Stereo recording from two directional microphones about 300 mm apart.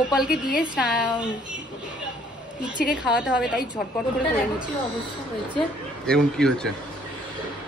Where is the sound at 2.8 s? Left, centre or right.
Centre.